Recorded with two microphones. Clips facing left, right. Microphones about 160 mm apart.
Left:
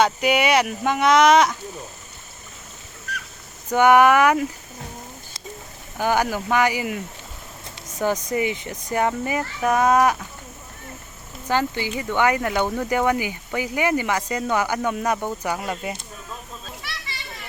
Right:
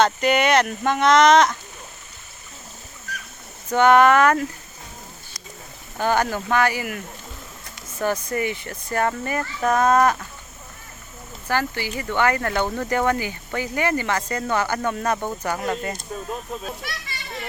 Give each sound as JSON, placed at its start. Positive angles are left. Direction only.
{"t": 0.0, "sound": "speech", "side_deg": 10}
{"t": 3.7, "sound": "speech", "side_deg": 10}
{"t": 6.0, "sound": "speech", "side_deg": 10}
{"t": 11.4, "sound": "speech", "side_deg": 20}
{"t": 16.6, "sound": "a child's voice", "side_deg": -50}